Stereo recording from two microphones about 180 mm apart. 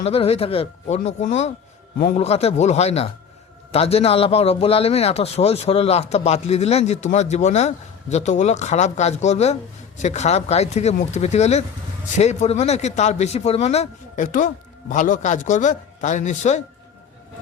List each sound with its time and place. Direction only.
0.0 s a man's voice: 35° left (ahead or behind)